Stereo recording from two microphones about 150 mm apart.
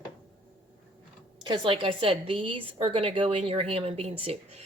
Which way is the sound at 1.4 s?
30° right (ahead or behind).